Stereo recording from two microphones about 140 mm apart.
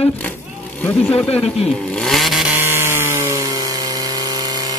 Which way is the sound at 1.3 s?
45° left (ahead or behind).